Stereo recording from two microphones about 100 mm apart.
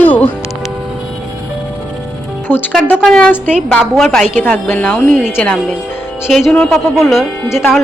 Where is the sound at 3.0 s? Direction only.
10° left (ahead or behind).